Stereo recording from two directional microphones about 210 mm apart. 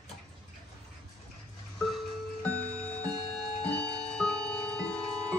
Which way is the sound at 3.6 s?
5° left (ahead or behind).